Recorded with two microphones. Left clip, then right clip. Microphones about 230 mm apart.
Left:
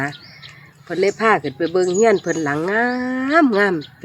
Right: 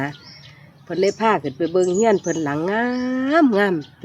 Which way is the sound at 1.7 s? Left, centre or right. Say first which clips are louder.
Left 2 dB; centre.